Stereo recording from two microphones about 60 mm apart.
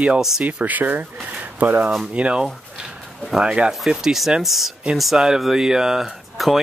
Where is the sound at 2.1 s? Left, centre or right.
Centre.